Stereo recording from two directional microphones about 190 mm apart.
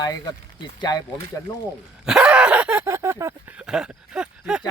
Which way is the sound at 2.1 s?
5° right (ahead or behind).